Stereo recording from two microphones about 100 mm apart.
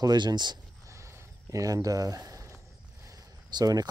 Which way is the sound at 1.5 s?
30° right (ahead or behind).